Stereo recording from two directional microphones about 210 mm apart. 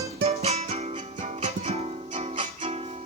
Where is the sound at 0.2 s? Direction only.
30° right (ahead or behind).